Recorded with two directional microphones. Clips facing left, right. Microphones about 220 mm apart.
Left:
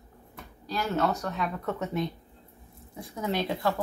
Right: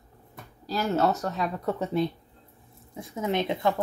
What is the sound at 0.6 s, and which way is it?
Speech, 40° right (ahead or behind).